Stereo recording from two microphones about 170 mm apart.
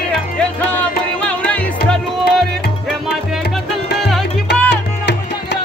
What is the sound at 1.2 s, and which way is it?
Music, 5° left (ahead or behind).